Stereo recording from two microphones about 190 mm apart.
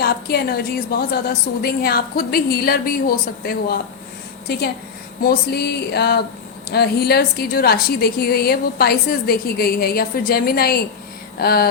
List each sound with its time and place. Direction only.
0.0 s a woman's voice: 55° left (ahead or behind)
5.2 s a sound: 55° left (ahead or behind)
6.7 s a woman's voice: 55° left (ahead or behind)